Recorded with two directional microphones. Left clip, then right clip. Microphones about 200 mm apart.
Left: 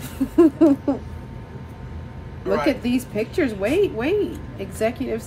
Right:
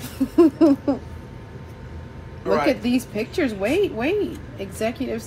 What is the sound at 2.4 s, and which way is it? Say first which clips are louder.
A man's voice: right 1 dB; 10° left (ahead or behind).